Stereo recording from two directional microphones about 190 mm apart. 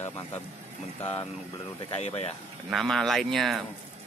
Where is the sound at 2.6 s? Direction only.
Centre (ahead or behind).